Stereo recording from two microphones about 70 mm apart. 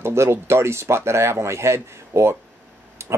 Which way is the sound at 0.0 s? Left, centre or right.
Right.